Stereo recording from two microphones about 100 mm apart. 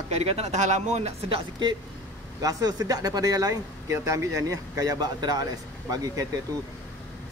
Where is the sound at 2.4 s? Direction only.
35° right (ahead or behind).